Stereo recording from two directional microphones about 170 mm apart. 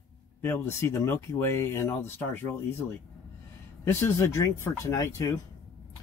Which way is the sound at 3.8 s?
15° left (ahead or behind).